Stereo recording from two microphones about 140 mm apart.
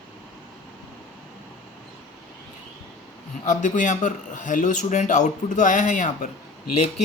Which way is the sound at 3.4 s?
60° left (ahead or behind).